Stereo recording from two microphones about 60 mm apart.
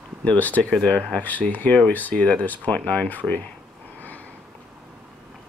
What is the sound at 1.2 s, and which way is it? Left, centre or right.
Speech, left.